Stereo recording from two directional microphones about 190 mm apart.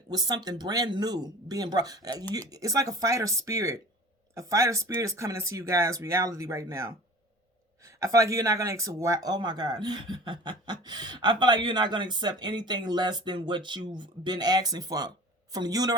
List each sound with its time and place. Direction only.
0.1 s speech: 20° right (ahead or behind)